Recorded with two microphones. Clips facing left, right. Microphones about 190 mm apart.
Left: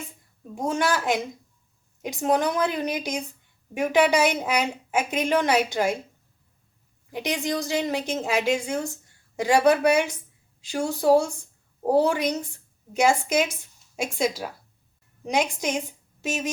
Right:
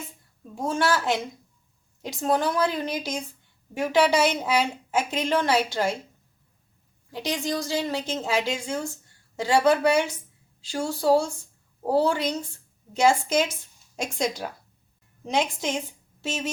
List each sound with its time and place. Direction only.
0.5 s a woman's voice: 15° left (ahead or behind)
7.1 s a woman's voice: 15° left (ahead or behind)